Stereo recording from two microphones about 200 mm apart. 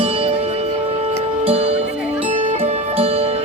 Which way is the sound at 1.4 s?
30° right (ahead or behind).